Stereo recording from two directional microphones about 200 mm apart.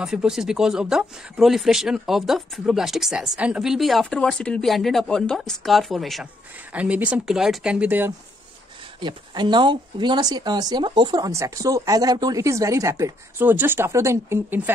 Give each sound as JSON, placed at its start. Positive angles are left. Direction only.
{"t": 0.0, "sound": "speech", "side_deg": -5}
{"t": 9.0, "sound": "speech", "side_deg": -20}